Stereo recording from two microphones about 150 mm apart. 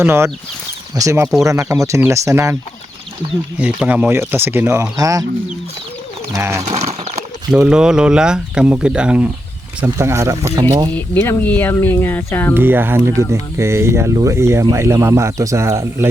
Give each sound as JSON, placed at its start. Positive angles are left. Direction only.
{"t": 0.0, "sound": "speech", "side_deg": -15}
{"t": 3.6, "sound": "speech", "side_deg": -10}
{"t": 6.3, "sound": "speech", "side_deg": -20}
{"t": 6.7, "sound": "horse", "side_deg": -50}
{"t": 7.5, "sound": "speech", "side_deg": -5}
{"t": 9.8, "sound": "speech", "side_deg": -20}
{"t": 10.9, "sound": "speech", "side_deg": 10}
{"t": 12.5, "sound": "speech", "side_deg": -15}